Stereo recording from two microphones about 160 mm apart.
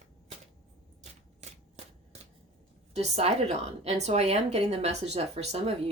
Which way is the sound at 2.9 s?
40° right (ahead or behind).